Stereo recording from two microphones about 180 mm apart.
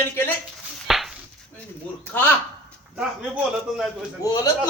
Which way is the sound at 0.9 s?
Centre (ahead or behind).